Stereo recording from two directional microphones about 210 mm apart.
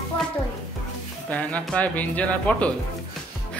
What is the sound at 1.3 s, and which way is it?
Speech, 5° left (ahead or behind).